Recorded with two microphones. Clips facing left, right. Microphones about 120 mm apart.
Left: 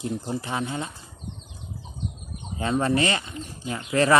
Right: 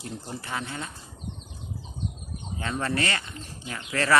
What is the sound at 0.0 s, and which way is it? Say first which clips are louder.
Speech: left 8 dB; 20° left (ahead or behind).